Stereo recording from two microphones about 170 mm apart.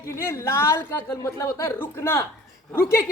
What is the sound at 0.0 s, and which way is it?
A woman's voice, 15° left (ahead or behind).